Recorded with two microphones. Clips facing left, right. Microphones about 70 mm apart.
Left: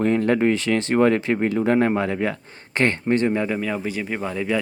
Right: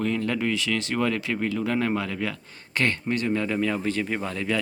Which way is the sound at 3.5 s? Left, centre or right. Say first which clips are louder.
Even; centre.